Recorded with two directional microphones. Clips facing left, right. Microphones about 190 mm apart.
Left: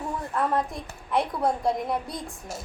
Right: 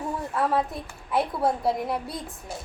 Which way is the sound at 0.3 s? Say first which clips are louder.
Right 1 dB; 5° right (ahead or behind).